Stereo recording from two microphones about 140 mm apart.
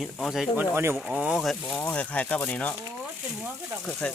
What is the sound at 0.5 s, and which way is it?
Speech, 15° right (ahead or behind).